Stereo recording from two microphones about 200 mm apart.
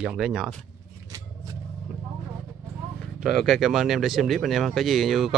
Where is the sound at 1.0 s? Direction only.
15° right (ahead or behind).